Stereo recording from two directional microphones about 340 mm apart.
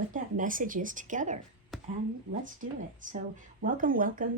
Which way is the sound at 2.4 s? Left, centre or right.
Right.